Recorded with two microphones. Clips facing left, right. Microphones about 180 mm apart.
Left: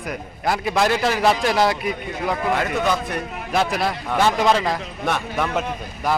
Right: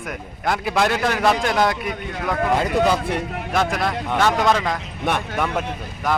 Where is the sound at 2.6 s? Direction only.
30° right (ahead or behind).